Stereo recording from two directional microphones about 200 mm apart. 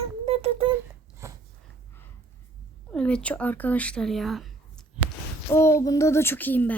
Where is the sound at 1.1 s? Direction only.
15° right (ahead or behind).